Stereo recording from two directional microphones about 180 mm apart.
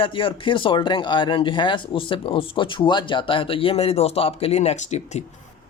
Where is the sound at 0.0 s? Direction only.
30° left (ahead or behind).